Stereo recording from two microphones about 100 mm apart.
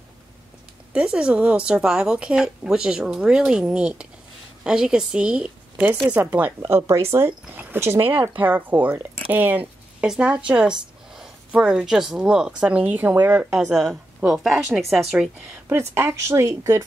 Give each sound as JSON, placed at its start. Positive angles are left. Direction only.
{"t": 0.9, "sound": "speech", "side_deg": -10}
{"t": 13.7, "sound": "speech", "side_deg": 0}
{"t": 15.7, "sound": "speech", "side_deg": -25}